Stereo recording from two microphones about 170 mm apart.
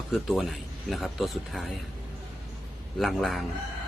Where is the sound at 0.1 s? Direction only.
Centre (ahead or behind).